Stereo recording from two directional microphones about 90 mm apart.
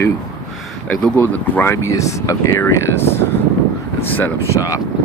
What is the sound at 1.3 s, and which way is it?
Speech, 20° left (ahead or behind).